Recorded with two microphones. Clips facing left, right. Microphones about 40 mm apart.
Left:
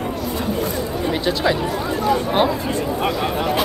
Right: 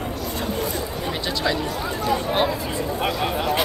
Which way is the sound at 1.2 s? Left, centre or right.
Centre.